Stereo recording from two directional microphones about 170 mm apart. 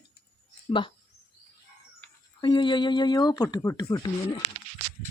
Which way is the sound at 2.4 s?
30° left (ahead or behind).